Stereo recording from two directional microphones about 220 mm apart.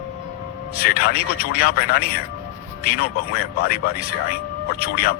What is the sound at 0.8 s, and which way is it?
Speech, 45° left (ahead or behind).